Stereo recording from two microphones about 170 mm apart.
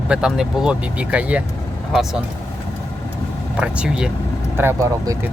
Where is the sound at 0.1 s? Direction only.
5° right (ahead or behind).